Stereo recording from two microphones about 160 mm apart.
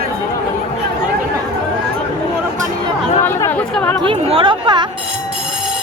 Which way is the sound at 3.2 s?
15° left (ahead or behind).